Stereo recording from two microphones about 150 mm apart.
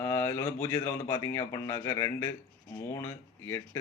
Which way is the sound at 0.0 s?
15° left (ahead or behind).